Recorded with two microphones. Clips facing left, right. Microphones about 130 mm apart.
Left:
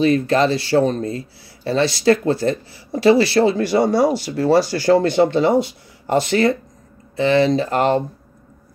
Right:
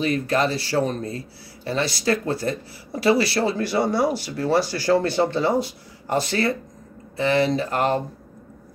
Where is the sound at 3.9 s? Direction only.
90° left.